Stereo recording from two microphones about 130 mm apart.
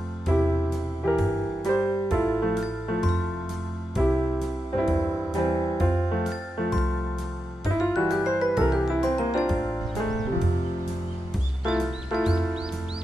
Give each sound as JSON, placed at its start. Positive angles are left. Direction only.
{"t": 0.3, "sound": "music", "side_deg": 0}
{"t": 1.7, "sound": "music", "side_deg": 20}
{"t": 2.0, "sound": "music", "side_deg": 0}
{"t": 4.9, "sound": "music", "side_deg": 25}
{"t": 5.8, "sound": "music", "side_deg": 0}
{"t": 8.1, "sound": "music", "side_deg": -5}
{"t": 11.6, "sound": "music", "side_deg": -5}